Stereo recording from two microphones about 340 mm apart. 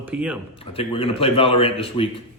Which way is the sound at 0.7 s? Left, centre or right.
Centre.